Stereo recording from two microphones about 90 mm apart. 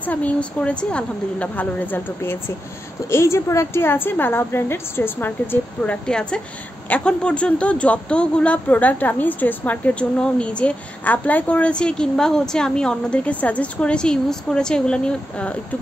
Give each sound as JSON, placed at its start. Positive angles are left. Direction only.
{"t": 0.0, "sound": "a woman's voice", "side_deg": 15}